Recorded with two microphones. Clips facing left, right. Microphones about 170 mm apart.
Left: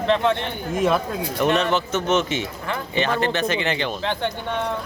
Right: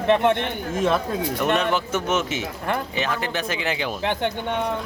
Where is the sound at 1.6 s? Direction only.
10° right (ahead or behind).